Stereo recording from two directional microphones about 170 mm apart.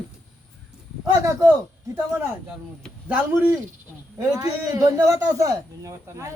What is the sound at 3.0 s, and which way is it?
A man's voice, 10° right (ahead or behind).